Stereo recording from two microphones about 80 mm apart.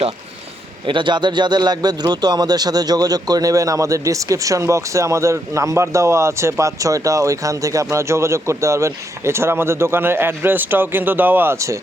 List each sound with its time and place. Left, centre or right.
0.9 s speech: right
11.5 s speech: right